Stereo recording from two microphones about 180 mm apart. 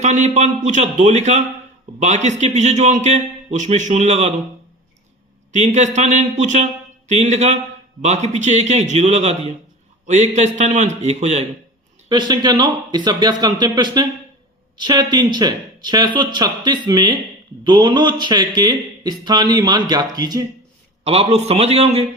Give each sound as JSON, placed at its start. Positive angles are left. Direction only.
{"t": 0.0, "sound": "a man's voice", "side_deg": -40}
{"t": 5.5, "sound": "a man's voice", "side_deg": -40}
{"t": 12.0, "sound": "speech", "side_deg": -25}
{"t": 21.0, "sound": "a man's voice", "side_deg": -35}